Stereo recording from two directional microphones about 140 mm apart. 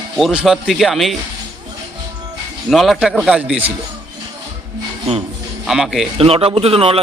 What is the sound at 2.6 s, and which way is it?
A man's voice, centre (ahead or behind).